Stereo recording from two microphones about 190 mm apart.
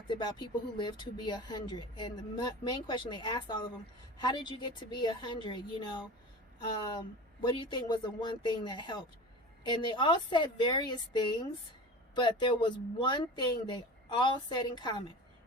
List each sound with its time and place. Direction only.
0.1 s speech: 25° left (ahead or behind)
7.4 s speech: 25° left (ahead or behind)